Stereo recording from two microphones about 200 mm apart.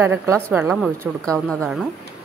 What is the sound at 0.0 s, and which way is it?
Speech, 10° right (ahead or behind).